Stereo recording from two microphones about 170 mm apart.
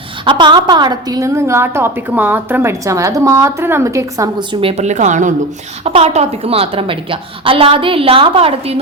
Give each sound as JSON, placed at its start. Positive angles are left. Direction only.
{"t": 0.3, "sound": "a woman's voice", "side_deg": -30}
{"t": 4.6, "sound": "a woman's voice", "side_deg": -40}